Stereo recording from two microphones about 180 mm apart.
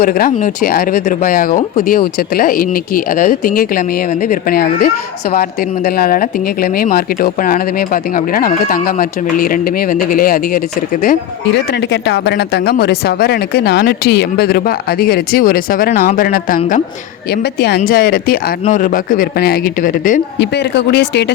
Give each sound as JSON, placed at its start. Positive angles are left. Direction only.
{"t": 0.0, "sound": "speech", "side_deg": 55}
{"t": 11.5, "sound": "speech", "side_deg": 75}
{"t": 17.3, "sound": "speech", "side_deg": 65}
{"t": 18.6, "sound": "speech", "side_deg": 45}
{"t": 20.4, "sound": "speech", "side_deg": 70}